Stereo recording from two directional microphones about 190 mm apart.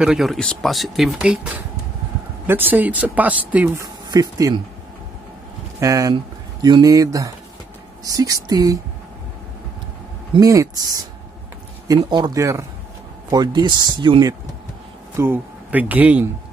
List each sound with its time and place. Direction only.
0.0 s speech: centre (ahead or behind)
4.1 s speech: 20° right (ahead or behind)
5.8 s speech: 15° right (ahead or behind)
10.3 s speech: 15° right (ahead or behind)
12.0 s speech: 25° right (ahead or behind)
15.1 s speech: 10° right (ahead or behind)